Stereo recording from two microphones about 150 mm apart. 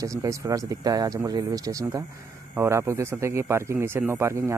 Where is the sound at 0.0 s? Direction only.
20° right (ahead or behind).